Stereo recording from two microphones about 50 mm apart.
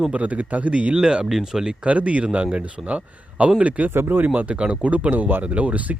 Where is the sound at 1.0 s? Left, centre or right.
Centre.